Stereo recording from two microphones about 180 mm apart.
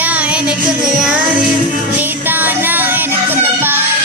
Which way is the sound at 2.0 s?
10° right (ahead or behind).